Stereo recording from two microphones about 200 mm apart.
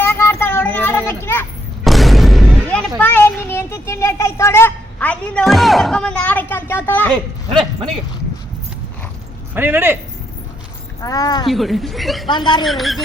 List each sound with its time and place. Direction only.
0.0 s child singing: 10° left (ahead or behind)
1.8 s a sound: centre (ahead or behind)
9.6 s speech: 10° right (ahead or behind)
11.0 s speech: 20° left (ahead or behind)
11.4 s speech: centre (ahead or behind)
12.3 s speech: 20° left (ahead or behind)
12.6 s speech: centre (ahead or behind)